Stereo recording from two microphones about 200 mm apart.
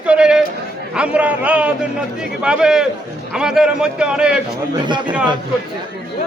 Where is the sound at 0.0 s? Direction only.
5° right (ahead or behind).